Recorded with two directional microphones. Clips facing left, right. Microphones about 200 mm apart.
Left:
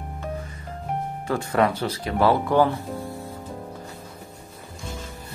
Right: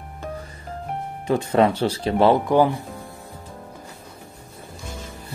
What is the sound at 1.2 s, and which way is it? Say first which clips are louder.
Speech: right 4 dB; 20° right (ahead or behind).